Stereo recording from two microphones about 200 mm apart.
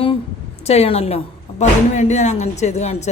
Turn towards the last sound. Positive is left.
turn(degrees=35)  # may be behind; listen again after turning